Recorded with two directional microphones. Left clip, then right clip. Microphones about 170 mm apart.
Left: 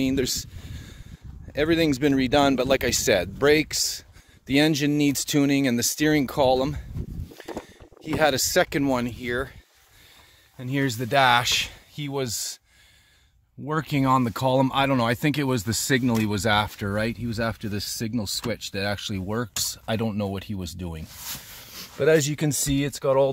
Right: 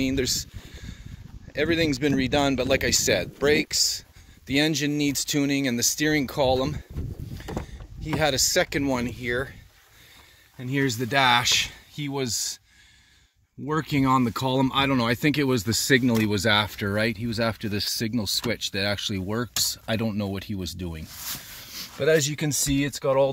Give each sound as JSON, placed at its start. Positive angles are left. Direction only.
{"t": 0.0, "sound": "speech", "side_deg": 35}
{"t": 8.2, "sound": "speech", "side_deg": 40}
{"t": 10.6, "sound": "speech", "side_deg": 25}
{"t": 13.7, "sound": "speech", "side_deg": 25}
{"t": 21.6, "sound": "speech", "side_deg": 40}